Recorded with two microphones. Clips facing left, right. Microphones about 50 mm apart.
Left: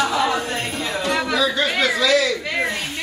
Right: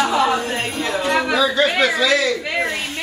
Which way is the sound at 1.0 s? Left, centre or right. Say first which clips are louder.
Right 2 dB; centre.